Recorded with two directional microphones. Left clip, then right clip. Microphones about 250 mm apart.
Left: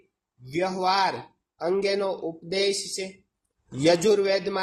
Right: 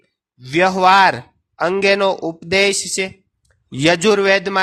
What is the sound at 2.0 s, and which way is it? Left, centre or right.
Speech, right.